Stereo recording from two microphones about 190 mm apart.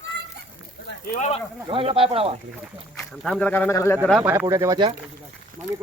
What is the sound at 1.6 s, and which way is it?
Speech, 30° right (ahead or behind).